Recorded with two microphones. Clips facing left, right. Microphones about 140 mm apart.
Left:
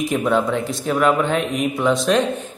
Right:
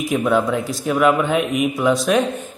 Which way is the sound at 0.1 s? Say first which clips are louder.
Right 3 dB; centre (ahead or behind).